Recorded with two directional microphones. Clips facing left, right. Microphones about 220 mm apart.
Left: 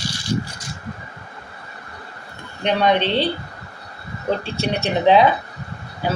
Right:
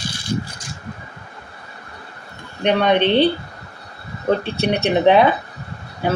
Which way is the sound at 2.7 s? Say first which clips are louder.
Right 2 dB; 60° right (ahead or behind).